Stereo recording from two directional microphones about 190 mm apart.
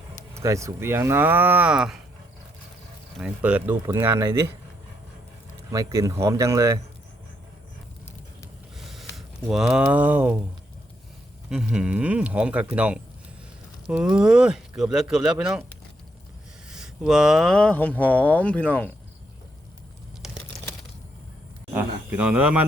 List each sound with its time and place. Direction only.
0.3 s speech: 15° right (ahead or behind)
3.2 s speech: 5° right (ahead or behind)
5.7 s speech: 20° right (ahead or behind)
8.8 s speech: centre (ahead or behind)
11.4 s speech: 5° right (ahead or behind)
16.6 s speech: 5° right (ahead or behind)
20.2 s crumpling: centre (ahead or behind)
21.7 s speech: 10° right (ahead or behind)